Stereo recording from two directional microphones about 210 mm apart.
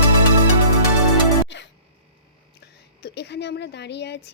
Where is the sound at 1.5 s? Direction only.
60° left (ahead or behind).